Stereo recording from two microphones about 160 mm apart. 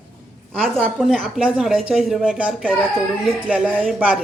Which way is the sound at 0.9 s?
Centre (ahead or behind).